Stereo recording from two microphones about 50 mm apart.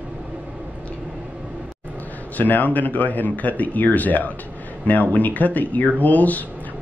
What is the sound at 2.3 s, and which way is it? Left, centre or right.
Speech, left.